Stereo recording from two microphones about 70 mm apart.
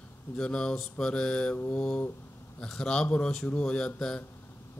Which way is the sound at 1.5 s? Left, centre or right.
Left.